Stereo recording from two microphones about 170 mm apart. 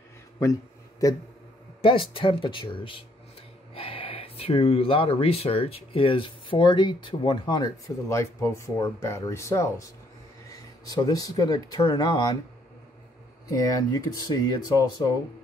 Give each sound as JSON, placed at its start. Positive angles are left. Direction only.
{"t": 0.4, "sound": "a sound", "side_deg": 20}
{"t": 1.8, "sound": "speech", "side_deg": 30}
{"t": 13.5, "sound": "speech", "side_deg": 20}